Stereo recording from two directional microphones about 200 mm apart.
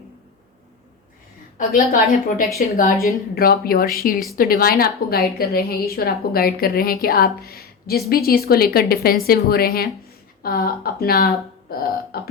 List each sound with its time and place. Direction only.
1.5 s a woman's voice: 45° left (ahead or behind)